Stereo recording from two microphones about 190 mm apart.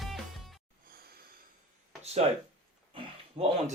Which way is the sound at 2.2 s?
35° right (ahead or behind).